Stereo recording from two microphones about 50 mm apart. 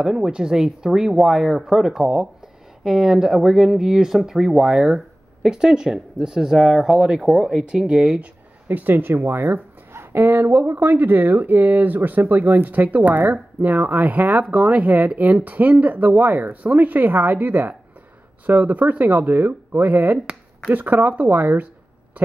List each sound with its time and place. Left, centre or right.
0.0 s speech: centre
8.6 s speech: right
9.1 s speech: right